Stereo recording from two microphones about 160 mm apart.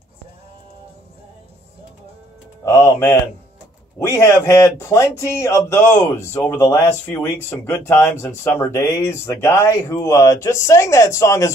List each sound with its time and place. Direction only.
2.6 s speech: 20° left (ahead or behind)